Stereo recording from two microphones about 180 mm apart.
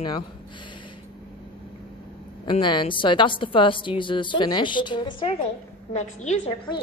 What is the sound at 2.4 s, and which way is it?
A woman's voice, 25° left (ahead or behind).